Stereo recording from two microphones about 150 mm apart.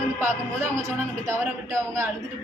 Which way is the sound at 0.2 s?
15° right (ahead or behind).